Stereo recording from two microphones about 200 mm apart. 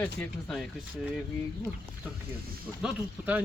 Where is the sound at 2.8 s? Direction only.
5° right (ahead or behind).